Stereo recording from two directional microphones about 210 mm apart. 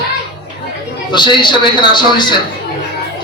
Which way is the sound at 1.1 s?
20° left (ahead or behind).